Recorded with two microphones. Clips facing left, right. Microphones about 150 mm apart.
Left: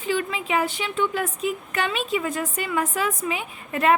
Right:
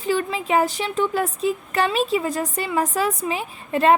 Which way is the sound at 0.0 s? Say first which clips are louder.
Right 3 dB; 40° right (ahead or behind).